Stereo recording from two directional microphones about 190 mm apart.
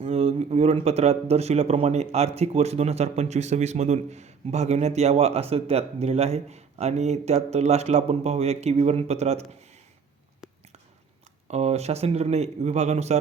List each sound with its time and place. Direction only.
0.0 s a man's voice: 30° right (ahead or behind)
11.4 s a man's voice: 35° right (ahead or behind)